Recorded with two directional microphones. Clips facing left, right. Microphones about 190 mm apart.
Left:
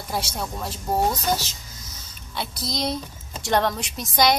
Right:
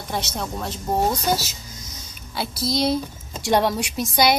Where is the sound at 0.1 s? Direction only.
5° left (ahead or behind).